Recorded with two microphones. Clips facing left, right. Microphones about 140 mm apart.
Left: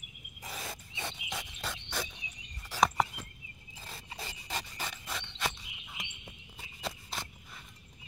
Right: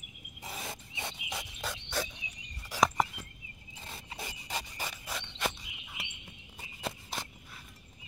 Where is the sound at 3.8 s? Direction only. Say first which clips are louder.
Right 1 dB; 20° right (ahead or behind); by 6.0 s centre (ahead or behind).